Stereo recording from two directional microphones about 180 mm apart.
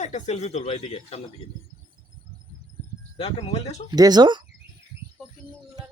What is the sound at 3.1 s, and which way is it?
Speech, 35° left (ahead or behind).